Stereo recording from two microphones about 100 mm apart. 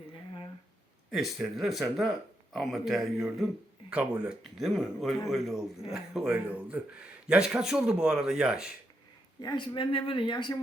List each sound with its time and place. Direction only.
1.1 s speech: centre (ahead or behind)
9.4 s speech: 50° left (ahead or behind)